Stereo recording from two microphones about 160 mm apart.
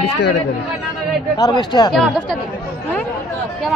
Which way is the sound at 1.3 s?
25° left (ahead or behind).